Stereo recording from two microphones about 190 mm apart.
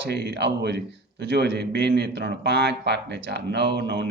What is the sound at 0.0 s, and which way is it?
A man's voice, 65° right (ahead or behind).